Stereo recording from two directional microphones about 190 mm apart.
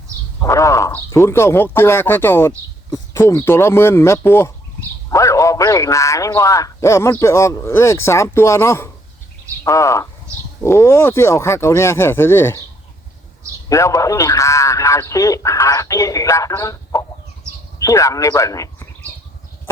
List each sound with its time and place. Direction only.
0.3 s a man's voice: 15° left (ahead or behind)
13.7 s a man's voice: 15° left (ahead or behind)